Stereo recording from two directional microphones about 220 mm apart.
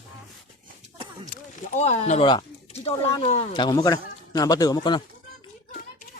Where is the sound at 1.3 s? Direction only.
30° left (ahead or behind).